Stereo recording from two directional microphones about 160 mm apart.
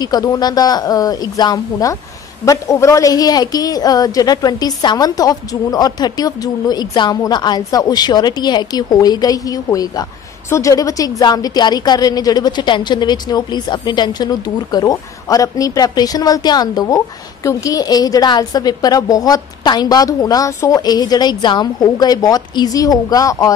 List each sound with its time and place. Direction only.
0.0 s a woman's voice: 25° left (ahead or behind)